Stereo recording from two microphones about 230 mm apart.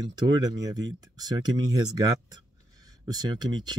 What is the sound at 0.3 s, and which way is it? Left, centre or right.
Speech, centre.